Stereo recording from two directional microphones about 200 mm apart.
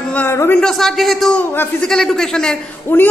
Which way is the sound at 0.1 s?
10° left (ahead or behind).